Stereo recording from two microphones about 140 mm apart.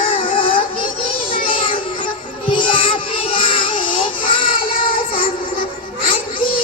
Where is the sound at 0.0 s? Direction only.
40° left (ahead or behind).